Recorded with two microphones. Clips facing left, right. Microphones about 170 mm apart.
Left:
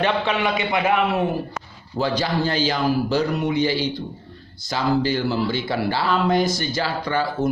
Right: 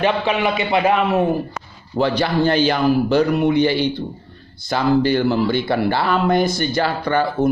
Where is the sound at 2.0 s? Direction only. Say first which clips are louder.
Right 4 dB; 60° right (ahead or behind).